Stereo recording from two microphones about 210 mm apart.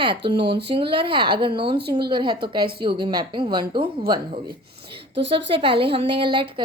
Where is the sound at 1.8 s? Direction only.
50° right (ahead or behind).